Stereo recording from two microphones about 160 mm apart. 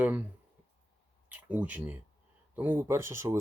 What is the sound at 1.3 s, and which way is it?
Speech, 10° right (ahead or behind).